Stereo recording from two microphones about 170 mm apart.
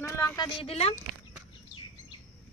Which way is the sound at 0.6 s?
35° left (ahead or behind).